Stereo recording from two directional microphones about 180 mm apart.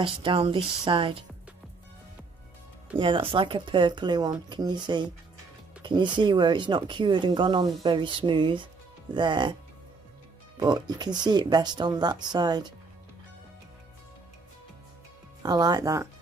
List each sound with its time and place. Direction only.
0.0 s speech: 30° right (ahead or behind)
3.0 s speech: 30° right (ahead or behind)
10.6 s speech: 20° right (ahead or behind)
15.4 s speech: 20° right (ahead or behind)